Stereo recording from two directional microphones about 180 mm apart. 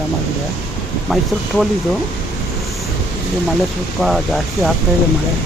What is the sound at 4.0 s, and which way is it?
Speech, centre (ahead or behind).